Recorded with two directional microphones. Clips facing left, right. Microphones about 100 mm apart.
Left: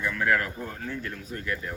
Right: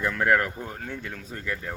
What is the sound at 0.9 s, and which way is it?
Speech, 90° right.